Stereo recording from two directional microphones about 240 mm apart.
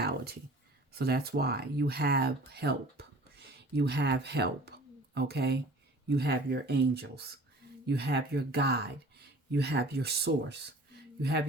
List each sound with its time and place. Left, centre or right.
0.9 s speech: right